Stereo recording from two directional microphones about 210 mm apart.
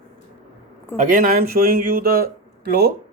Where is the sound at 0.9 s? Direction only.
40° right (ahead or behind).